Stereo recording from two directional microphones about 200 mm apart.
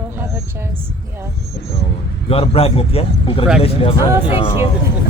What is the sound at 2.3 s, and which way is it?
Speech, 30° left (ahead or behind).